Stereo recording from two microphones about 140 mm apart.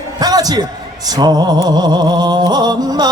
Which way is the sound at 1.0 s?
30° right (ahead or behind).